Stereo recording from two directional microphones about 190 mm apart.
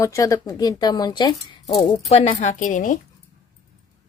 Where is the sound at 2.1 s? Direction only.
35° left (ahead or behind).